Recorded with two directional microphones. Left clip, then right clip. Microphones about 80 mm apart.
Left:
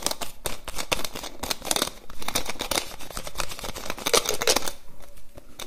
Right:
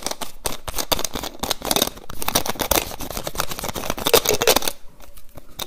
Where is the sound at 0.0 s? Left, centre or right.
Centre.